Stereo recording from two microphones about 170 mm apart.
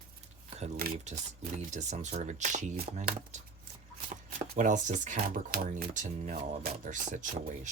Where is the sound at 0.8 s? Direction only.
60° right (ahead or behind).